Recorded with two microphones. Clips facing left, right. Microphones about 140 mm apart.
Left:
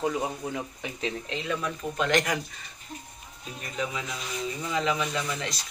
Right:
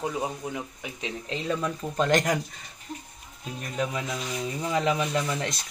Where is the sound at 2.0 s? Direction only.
45° right (ahead or behind).